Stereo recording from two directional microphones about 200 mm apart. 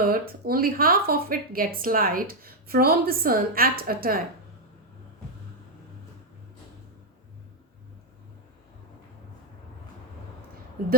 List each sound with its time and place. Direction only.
0.0 s speech: 50° right (ahead or behind)
10.8 s speech: 45° right (ahead or behind)